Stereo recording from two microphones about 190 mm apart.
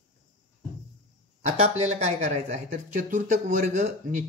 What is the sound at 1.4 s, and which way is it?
Speech, 35° right (ahead or behind).